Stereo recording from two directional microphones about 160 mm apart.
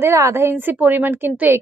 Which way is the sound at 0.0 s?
15° right (ahead or behind).